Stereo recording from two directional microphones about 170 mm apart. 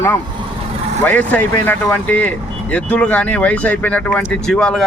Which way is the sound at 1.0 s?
10° left (ahead or behind).